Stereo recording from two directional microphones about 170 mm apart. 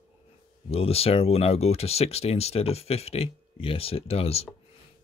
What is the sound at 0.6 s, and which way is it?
Speech, 35° left (ahead or behind).